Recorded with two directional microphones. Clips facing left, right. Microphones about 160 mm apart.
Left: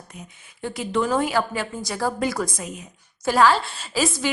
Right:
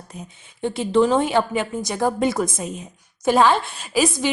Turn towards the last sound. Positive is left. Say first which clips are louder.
# right 3 dB
turn(degrees=-15)  # may be behind; listen again after turning